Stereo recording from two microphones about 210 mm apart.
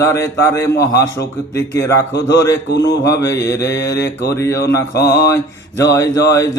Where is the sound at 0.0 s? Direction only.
15° left (ahead or behind).